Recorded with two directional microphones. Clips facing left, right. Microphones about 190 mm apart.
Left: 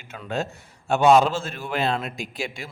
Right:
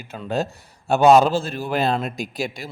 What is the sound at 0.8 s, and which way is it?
A man's voice, 40° right (ahead or behind).